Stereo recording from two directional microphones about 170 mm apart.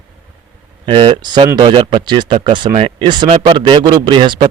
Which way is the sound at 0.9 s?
30° right (ahead or behind).